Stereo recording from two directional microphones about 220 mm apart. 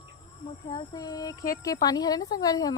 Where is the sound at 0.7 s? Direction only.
15° left (ahead or behind).